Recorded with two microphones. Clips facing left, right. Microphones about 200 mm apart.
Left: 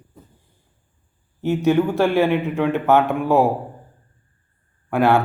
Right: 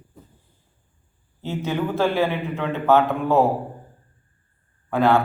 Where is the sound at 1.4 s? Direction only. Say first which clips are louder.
Left 8 dB; 15° left (ahead or behind).